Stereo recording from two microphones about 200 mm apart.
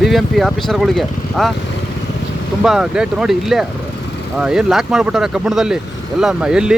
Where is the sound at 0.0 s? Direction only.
Centre (ahead or behind).